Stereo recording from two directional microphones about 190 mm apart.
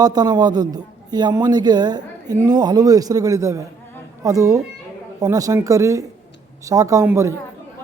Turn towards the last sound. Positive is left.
turn(degrees=-15)  # may be behind; listen again after turning